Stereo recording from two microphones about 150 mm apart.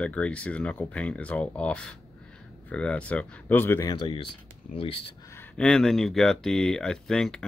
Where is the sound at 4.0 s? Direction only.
30° left (ahead or behind).